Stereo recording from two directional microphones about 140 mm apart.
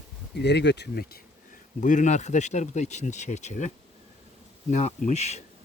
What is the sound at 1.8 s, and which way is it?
Speech, 60° left (ahead or behind).